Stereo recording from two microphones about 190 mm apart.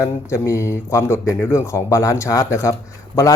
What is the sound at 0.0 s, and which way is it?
Speech, 15° left (ahead or behind).